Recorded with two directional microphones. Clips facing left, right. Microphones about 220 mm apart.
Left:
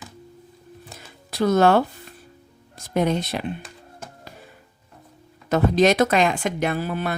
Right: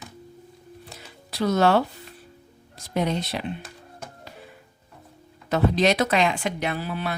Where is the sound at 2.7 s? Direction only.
50° left (ahead or behind).